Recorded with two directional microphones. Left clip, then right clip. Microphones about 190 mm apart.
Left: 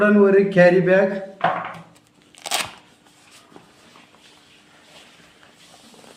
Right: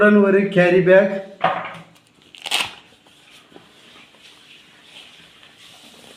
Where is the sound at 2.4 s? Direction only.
30° left (ahead or behind).